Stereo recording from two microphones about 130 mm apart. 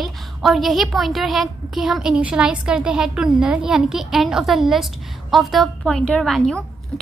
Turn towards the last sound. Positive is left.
turn(degrees=5)  # may be behind; listen again after turning